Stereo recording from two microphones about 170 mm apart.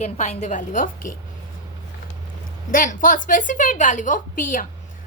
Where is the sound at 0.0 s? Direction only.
40° left (ahead or behind).